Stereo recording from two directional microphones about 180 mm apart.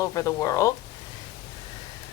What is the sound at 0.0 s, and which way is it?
Speech, 20° left (ahead or behind).